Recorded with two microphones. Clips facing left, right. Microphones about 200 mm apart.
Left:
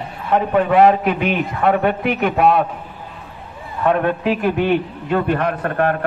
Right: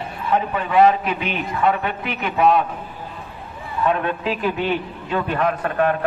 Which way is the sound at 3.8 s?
50° left (ahead or behind).